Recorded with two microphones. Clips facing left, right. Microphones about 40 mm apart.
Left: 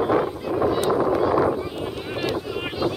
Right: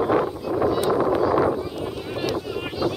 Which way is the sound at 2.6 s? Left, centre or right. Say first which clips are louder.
Even; centre.